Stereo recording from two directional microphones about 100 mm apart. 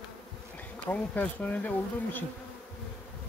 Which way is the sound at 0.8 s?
15° left (ahead or behind).